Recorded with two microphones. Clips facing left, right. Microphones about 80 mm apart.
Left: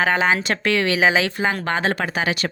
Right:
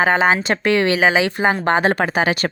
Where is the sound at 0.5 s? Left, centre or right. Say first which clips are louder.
Right 4 dB; right.